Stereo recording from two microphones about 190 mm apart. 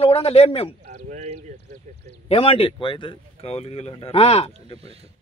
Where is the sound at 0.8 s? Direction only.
45° right (ahead or behind).